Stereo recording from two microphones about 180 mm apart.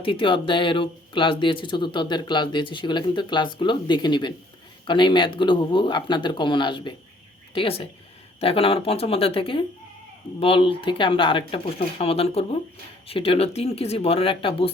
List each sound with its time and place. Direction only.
0.0 s speech: 30° left (ahead or behind)